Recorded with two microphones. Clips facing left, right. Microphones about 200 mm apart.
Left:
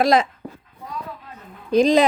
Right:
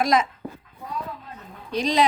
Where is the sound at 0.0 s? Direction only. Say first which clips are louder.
Left 4 dB; 35° left (ahead or behind).